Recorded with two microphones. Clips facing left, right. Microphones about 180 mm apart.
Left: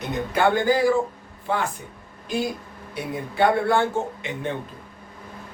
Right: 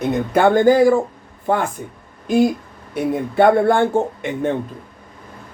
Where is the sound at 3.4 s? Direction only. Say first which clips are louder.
Right 6 dB; 50° right (ahead or behind).